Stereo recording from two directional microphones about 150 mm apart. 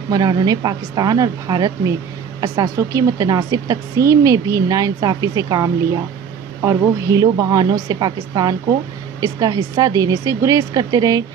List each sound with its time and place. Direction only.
0.1 s a woman's voice: 25° right (ahead or behind)